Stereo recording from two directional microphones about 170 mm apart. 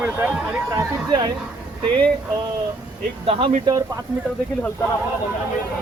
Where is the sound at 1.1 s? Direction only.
25° right (ahead or behind).